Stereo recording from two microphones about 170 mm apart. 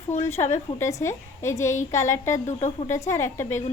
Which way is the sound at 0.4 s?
25° left (ahead or behind).